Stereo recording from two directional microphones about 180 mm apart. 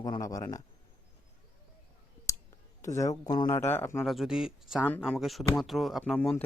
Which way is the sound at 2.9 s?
20° left (ahead or behind).